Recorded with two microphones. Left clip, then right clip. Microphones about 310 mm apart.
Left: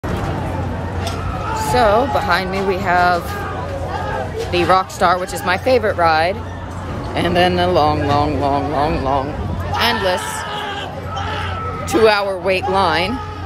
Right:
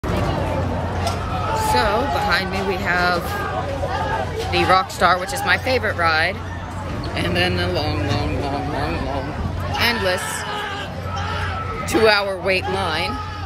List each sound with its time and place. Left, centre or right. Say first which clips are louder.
1.7 s speech: left 6 dB; centre
4.5 s speech: left 2 dB; centre
11.9 s speech: left 3 dB; centre
12.7 s speech: left 6 dB; left